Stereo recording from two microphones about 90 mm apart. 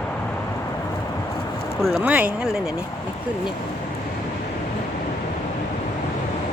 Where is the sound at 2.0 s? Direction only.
15° right (ahead or behind).